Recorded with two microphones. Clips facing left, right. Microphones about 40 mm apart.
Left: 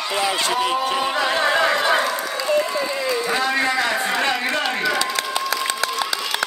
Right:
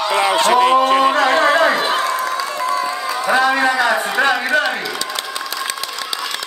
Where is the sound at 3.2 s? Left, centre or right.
Right.